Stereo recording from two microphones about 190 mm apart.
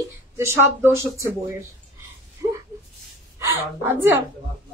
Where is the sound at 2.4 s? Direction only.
15° right (ahead or behind).